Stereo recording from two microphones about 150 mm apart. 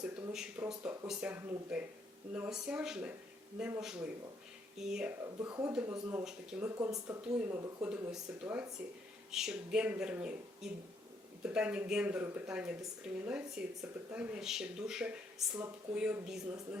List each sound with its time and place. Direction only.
0.0 s speech: 10° right (ahead or behind)
5.2 s speech: 25° right (ahead or behind)
5.6 s speech: 10° right (ahead or behind)
15.5 s speech: 20° right (ahead or behind)
16.0 s speech: 5° right (ahead or behind)